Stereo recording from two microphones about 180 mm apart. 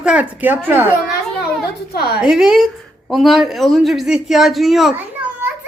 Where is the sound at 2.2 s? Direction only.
5° right (ahead or behind).